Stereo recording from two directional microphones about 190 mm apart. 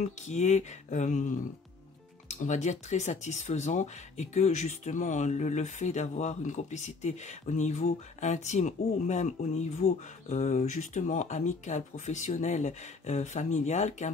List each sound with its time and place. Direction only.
0.0 s speech: 35° left (ahead or behind)
2.3 s speech: 40° left (ahead or behind)